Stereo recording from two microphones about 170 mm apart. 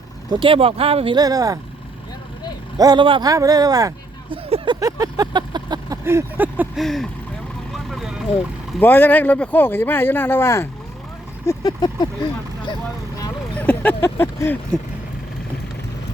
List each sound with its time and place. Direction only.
0.3 s speech: 30° right (ahead or behind)
2.7 s speech: 25° right (ahead or behind)
4.4 s vehicle: 30° right (ahead or behind); by 6.7 s 10° right (ahead or behind)
6.7 s speech: centre (ahead or behind)
7.7 s vehicle: centre (ahead or behind)
8.8 s speech: 10° left (ahead or behind)
11.4 s a sound: 25° left (ahead or behind)
13.6 s a sound: 10° left (ahead or behind)